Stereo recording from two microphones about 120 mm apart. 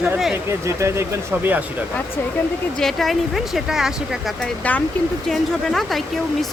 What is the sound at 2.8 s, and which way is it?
Speech, centre (ahead or behind).